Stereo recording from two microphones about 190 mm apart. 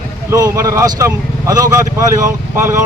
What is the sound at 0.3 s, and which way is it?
Speech, 15° right (ahead or behind).